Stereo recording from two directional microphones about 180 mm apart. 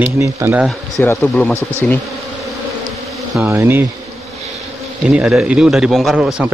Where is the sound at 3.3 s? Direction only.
10° right (ahead or behind).